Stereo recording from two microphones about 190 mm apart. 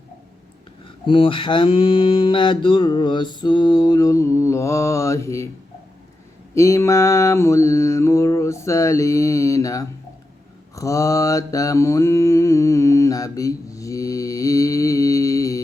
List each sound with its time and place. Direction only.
1.0 s mantra: 25° left (ahead or behind)
6.5 s mantra: 15° left (ahead or behind)